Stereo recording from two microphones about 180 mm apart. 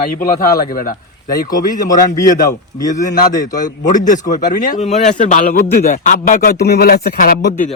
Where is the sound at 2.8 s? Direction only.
20° left (ahead or behind).